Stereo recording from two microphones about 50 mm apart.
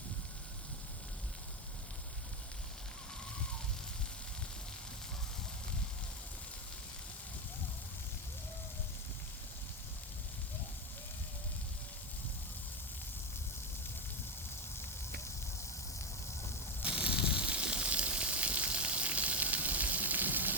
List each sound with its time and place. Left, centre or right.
16.8 s fire: right